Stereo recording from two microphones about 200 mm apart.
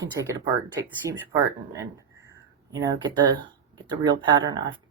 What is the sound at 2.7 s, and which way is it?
Speech, 20° right (ahead or behind).